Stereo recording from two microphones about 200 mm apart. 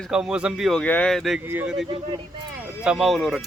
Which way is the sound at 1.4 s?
10° right (ahead or behind).